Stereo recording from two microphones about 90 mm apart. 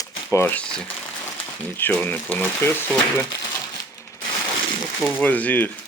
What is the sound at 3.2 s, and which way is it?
Crumpling, 40° left (ahead or behind).